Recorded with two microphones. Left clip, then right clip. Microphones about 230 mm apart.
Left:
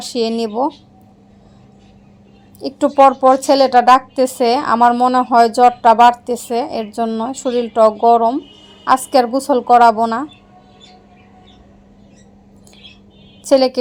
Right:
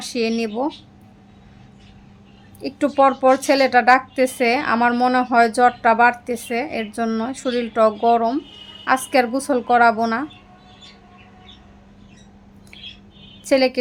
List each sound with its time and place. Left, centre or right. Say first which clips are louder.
0.0 s a woman's voice: left 4 dB; centre
2.6 s a woman's voice: left 6 dB; centre
13.4 s a woman's voice: left 5 dB; centre